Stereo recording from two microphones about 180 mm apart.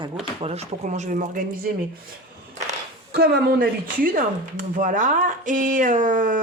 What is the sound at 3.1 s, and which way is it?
Speech, 60° right (ahead or behind).